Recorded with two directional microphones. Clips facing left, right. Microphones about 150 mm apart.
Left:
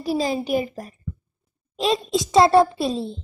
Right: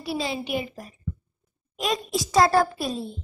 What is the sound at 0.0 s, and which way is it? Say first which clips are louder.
Speech: left 6 dB; 40° left (ahead or behind).